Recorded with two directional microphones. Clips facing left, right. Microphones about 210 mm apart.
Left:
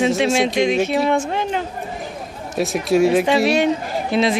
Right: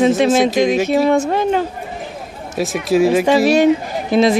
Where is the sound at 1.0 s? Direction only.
40° right (ahead or behind).